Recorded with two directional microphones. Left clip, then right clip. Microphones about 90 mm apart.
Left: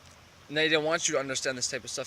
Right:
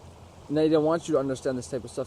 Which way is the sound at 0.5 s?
60° left (ahead or behind).